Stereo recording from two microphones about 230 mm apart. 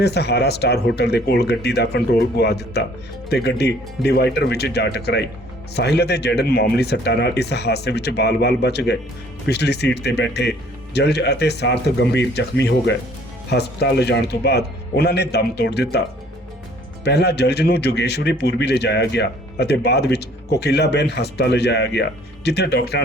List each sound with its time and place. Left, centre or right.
0.0 s a man's voice: left
17.0 s a man's voice: left